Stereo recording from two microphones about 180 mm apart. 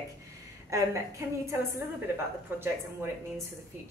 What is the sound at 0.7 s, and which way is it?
A woman's voice, 15° right (ahead or behind).